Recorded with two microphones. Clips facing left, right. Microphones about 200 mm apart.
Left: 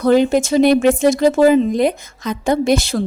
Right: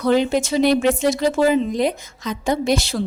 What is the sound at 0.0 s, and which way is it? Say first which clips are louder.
A woman's voice: left 4 dB; 50° left (ahead or behind).